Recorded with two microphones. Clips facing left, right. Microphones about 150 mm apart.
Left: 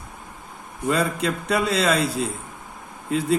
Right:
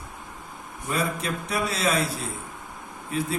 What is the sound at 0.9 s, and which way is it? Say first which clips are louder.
Speech: left 5 dB; 85° left.